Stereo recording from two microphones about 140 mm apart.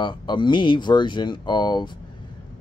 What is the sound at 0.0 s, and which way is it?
Speech, 35° left (ahead or behind).